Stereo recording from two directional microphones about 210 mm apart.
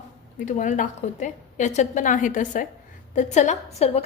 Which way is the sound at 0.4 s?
35° left (ahead or behind).